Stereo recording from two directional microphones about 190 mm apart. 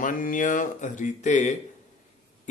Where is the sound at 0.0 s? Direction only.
45° left (ahead or behind).